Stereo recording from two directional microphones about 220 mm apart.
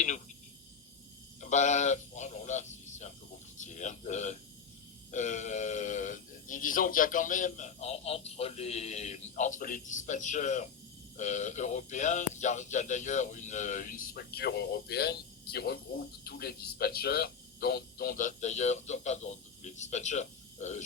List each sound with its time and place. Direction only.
1.4 s speech: 35° left (ahead or behind)